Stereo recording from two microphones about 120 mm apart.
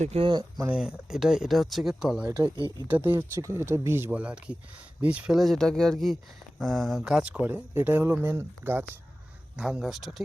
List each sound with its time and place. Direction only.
0.2 s speech: 40° right (ahead or behind)
0.7 s speech: 5° right (ahead or behind)
3.2 s speech: 25° right (ahead or behind)
9.6 s speech: 5° right (ahead or behind)